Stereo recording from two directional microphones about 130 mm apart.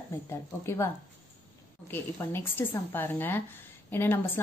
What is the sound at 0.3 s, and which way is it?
A woman's voice, 20° left (ahead or behind).